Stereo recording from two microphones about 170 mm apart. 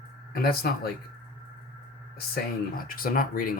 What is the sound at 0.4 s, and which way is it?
Speech, 65° left (ahead or behind).